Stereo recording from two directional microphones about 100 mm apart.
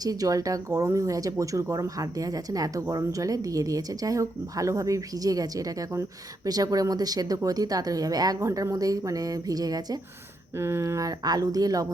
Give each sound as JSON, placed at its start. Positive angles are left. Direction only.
{"t": 0.0, "sound": "speech", "side_deg": -40}
{"t": 10.6, "sound": "speech", "side_deg": -25}